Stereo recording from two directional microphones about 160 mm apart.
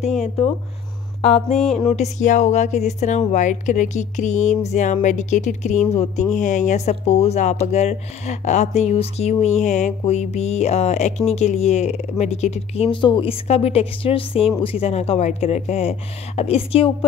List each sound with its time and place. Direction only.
1.5 s music: centre (ahead or behind)
1.9 s speech: 45° left (ahead or behind)